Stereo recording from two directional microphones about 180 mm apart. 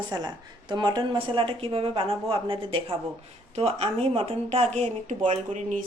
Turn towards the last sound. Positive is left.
turn(degrees=-40)  # may be behind; listen again after turning